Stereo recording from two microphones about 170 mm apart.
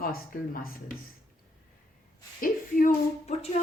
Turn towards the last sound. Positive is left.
turn(degrees=55)  # may be behind; listen again after turning